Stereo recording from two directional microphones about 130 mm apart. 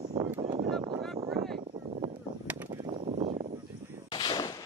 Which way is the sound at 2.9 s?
55° right (ahead or behind).